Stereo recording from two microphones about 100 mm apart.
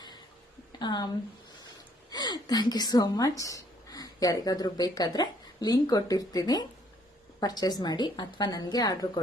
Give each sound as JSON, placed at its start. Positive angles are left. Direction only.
{"t": 0.8, "sound": "speech", "side_deg": 45}
{"t": 2.0, "sound": "a woman's voice", "side_deg": 45}